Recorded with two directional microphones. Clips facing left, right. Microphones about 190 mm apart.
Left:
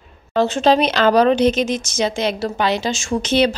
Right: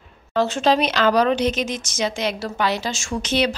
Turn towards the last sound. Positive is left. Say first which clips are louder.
# left 5 dB
turn(degrees=30)  # may be behind; listen again after turning